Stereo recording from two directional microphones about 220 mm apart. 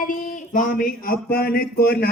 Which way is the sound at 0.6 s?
40° left (ahead or behind).